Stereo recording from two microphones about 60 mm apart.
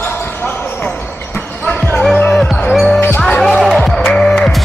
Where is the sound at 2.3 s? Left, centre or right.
Centre.